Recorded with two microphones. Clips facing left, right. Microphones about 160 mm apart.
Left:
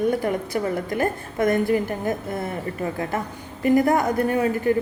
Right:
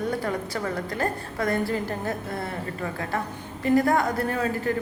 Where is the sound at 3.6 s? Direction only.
20° left (ahead or behind).